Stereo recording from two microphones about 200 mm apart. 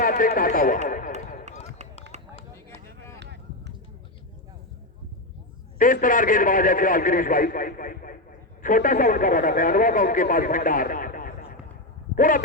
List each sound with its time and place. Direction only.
0.0 s speech: 45° left (ahead or behind)
2.1 s run: 35° right (ahead or behind)
2.6 s a sound: 15° left (ahead or behind)
5.8 s speech: 40° left (ahead or behind)